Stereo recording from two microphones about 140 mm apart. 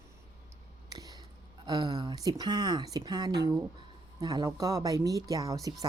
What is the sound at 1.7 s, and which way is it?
Speech, 30° right (ahead or behind).